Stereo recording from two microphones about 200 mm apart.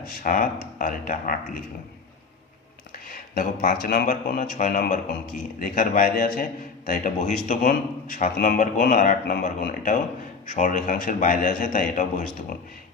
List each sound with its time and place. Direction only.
0.2 s speech: 40° left (ahead or behind)
3.1 s a man's voice: 45° left (ahead or behind)